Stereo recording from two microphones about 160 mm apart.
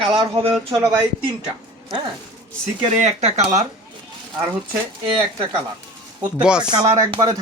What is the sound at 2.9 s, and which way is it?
Speech, 45° right (ahead or behind).